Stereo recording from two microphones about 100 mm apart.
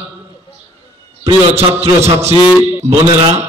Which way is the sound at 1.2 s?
85° right.